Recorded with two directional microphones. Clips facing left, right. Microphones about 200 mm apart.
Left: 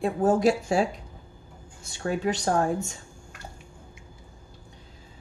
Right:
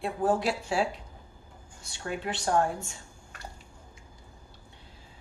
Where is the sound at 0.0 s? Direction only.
45° left (ahead or behind).